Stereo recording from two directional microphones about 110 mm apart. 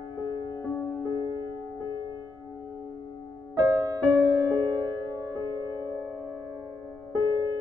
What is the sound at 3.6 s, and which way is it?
Music, 35° right (ahead or behind).